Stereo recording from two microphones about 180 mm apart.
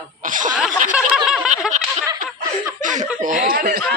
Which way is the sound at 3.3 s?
50° right (ahead or behind).